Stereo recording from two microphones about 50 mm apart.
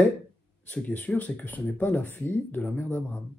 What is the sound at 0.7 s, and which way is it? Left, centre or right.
Speech, left.